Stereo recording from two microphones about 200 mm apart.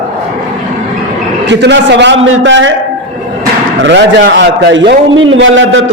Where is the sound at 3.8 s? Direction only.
60° right (ahead or behind).